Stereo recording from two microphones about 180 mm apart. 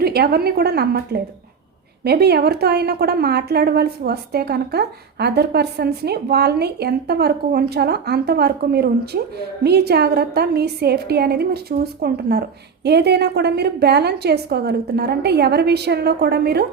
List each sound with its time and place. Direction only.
0.0 s a woman's voice: 60° right (ahead or behind)